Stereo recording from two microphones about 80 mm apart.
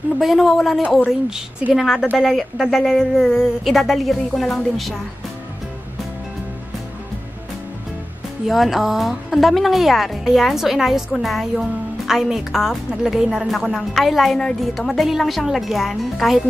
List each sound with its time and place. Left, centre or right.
0.2 s a woman's voice: centre
8.5 s a woman's voice: centre